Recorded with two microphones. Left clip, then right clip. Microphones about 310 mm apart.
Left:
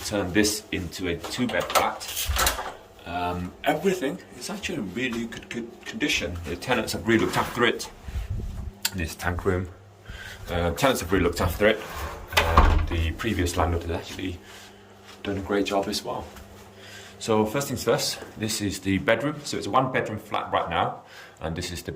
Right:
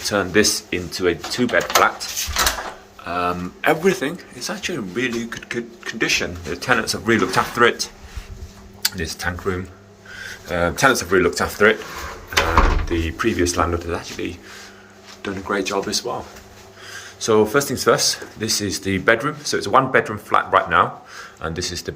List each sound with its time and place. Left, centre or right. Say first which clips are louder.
0.1 s speech: right 7 dB; centre
3.1 s speech: right 7 dB; centre
12.9 s speech: right 8 dB; centre